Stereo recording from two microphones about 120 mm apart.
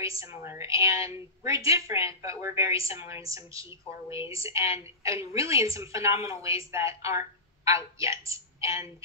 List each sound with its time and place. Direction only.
0.0 s a woman's voice: 25° right (ahead or behind)